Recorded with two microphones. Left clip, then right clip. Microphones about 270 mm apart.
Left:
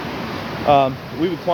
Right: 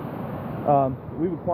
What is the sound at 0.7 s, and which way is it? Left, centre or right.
Speech, centre.